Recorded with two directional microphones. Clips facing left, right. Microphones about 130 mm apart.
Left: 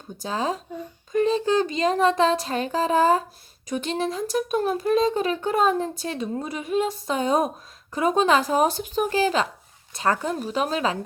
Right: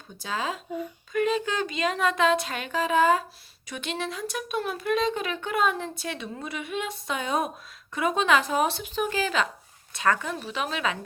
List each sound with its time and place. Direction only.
0.2 s speech: 40° left (ahead or behind)